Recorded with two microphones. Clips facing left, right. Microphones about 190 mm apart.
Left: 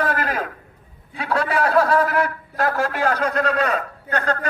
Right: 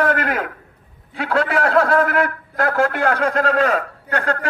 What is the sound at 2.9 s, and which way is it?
A man's voice, 60° right (ahead or behind).